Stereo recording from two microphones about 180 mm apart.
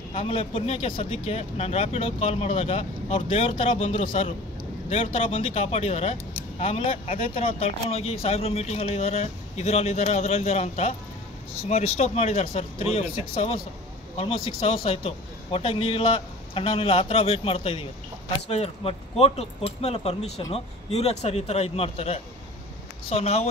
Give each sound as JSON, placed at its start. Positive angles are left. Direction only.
{"t": 0.1, "sound": "speech", "side_deg": 30}